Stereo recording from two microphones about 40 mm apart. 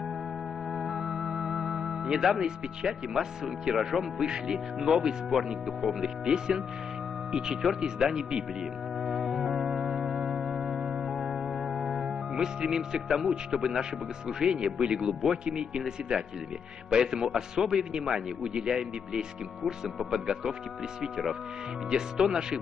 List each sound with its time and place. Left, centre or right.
0.7 s music: centre
2.4 s speech: centre
7.8 s speech: centre
9.0 s music: centre
10.8 s music: right
11.1 s music: centre
13.3 s speech: centre
16.9 s speech: centre
21.9 s speech: centre